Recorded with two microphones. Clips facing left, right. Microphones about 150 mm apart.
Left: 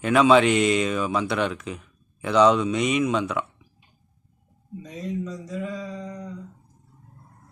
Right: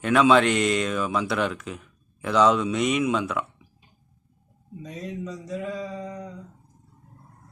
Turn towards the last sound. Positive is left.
turn(degrees=-5)  # may be behind; listen again after turning